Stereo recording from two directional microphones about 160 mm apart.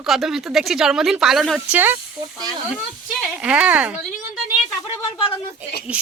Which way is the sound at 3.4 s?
10° right (ahead or behind).